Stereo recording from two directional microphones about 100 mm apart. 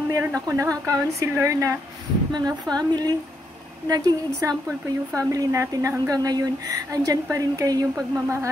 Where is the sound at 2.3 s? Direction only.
40° right (ahead or behind).